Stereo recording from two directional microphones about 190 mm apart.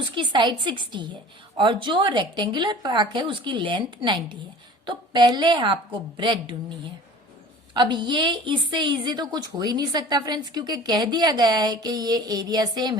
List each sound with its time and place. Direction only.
0.2 s a woman's voice: 25° right (ahead or behind)
7.7 s a woman's voice: 25° right (ahead or behind)